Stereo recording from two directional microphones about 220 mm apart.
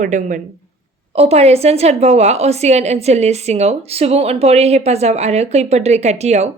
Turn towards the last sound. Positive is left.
turn(degrees=-30)  # may be behind; listen again after turning